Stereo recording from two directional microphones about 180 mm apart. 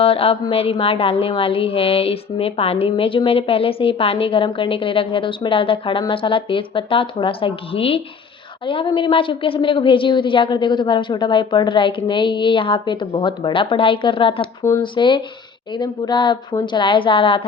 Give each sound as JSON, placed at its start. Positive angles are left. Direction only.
{"t": 0.0, "sound": "a woman's voice", "side_deg": 30}